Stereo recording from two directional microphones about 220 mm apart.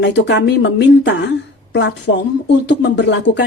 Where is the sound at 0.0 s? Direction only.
55° left (ahead or behind).